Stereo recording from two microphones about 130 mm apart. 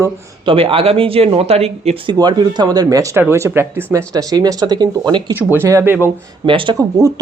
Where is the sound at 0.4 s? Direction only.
45° right (ahead or behind).